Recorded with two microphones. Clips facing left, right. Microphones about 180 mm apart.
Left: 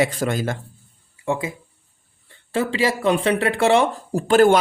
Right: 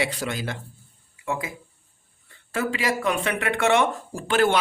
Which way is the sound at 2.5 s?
30° left (ahead or behind).